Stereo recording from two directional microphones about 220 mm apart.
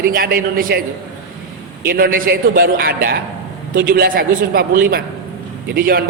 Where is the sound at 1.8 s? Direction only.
45° right (ahead or behind).